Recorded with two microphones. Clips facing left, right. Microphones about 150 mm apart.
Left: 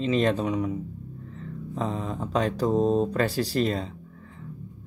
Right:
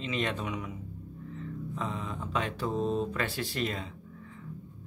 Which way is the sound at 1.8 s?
35° left (ahead or behind).